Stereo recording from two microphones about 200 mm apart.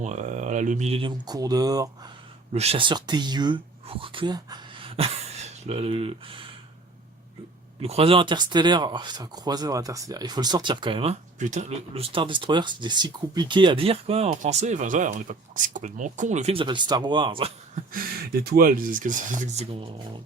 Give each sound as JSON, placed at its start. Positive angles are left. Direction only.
{"t": 0.0, "sound": "speech", "side_deg": -35}
{"t": 2.5, "sound": "speech", "side_deg": -30}
{"t": 7.8, "sound": "speech", "side_deg": -30}
{"t": 17.9, "sound": "speech", "side_deg": -45}